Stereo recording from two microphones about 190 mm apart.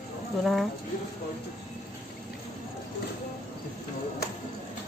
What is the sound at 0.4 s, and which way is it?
Speech, centre (ahead or behind).